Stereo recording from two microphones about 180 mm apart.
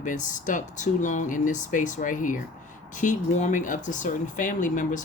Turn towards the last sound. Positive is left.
turn(degrees=45)  # may be behind; listen again after turning